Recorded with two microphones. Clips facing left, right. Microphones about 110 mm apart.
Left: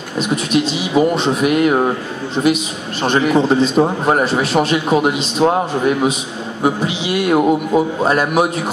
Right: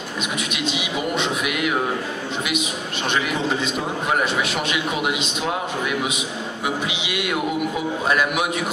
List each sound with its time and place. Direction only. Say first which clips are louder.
0.2 s a man's voice: left 11 dB; 35° left (ahead or behind)